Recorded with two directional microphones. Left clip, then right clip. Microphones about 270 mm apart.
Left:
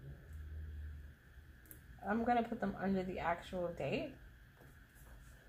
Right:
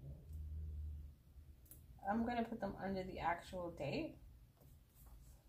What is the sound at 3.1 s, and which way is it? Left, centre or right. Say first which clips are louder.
Speech: left 3 dB; left.